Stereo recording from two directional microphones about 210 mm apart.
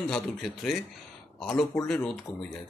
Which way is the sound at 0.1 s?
Centre (ahead or behind).